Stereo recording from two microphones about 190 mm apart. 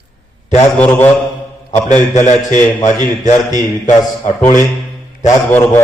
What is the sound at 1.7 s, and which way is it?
A man's voice, 40° left (ahead or behind).